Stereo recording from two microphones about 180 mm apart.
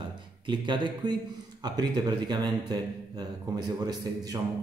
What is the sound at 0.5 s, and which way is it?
Speech, 25° right (ahead or behind).